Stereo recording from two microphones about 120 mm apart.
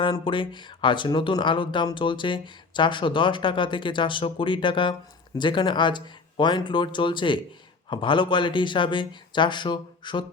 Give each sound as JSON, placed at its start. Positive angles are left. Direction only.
{"t": 0.0, "sound": "speech", "side_deg": 40}